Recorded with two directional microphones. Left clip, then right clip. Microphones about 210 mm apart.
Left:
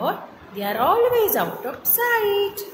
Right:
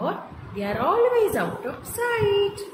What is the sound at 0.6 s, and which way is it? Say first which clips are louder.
A woman's voice: left 3 dB; 5° right (ahead or behind).